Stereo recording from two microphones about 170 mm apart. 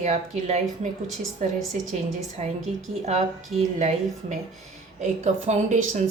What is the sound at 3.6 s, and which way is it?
Speech, 45° right (ahead or behind).